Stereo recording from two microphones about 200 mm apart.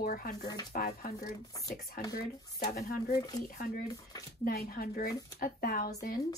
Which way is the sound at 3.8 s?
20° left (ahead or behind).